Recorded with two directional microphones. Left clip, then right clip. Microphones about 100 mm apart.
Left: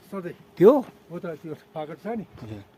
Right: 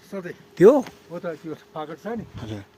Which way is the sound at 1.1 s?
10° left (ahead or behind).